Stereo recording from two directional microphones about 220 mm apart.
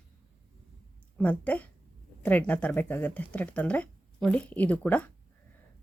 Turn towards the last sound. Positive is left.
turn(degrees=5)  # may be behind; listen again after turning